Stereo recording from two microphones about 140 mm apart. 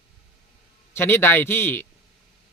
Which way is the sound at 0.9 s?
15° left (ahead or behind).